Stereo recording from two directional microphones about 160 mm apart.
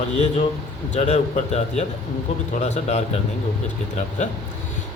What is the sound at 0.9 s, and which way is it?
A man's voice, 40° left (ahead or behind).